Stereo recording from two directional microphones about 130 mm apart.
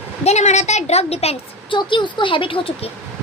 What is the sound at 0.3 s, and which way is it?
A woman's voice, 60° left (ahead or behind).